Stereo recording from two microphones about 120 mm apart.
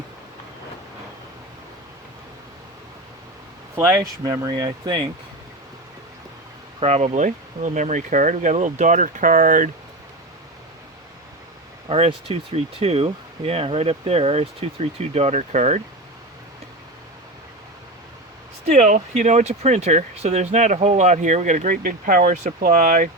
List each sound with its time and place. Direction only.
3.8 s speech: 20° right (ahead or behind)
4.2 s speech: 30° right (ahead or behind)
6.7 s speech: 60° right (ahead or behind); by 9.6 s 90° right
11.9 s speech: 55° right (ahead or behind); by 15.8 s 75° right (ahead or behind)
18.6 s speech: 75° right (ahead or behind)